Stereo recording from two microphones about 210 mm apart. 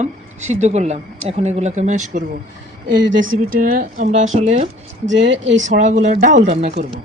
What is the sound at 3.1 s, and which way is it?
Speech, 65° right (ahead or behind).